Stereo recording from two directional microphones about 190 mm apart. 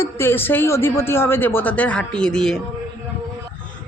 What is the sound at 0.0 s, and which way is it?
Speech, 10° left (ahead or behind).